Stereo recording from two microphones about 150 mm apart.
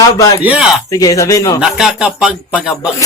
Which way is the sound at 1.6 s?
5° right (ahead or behind).